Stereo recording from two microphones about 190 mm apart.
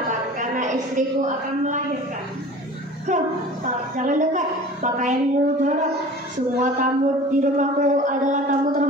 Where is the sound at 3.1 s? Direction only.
40° right (ahead or behind).